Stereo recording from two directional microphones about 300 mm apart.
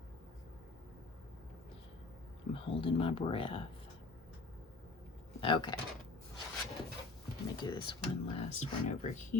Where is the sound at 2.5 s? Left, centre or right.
Centre.